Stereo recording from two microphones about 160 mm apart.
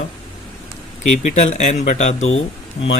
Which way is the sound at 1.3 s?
45° left (ahead or behind).